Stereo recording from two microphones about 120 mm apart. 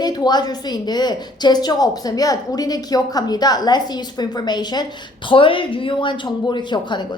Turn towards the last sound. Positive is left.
turn(degrees=40)  # may be behind; listen again after turning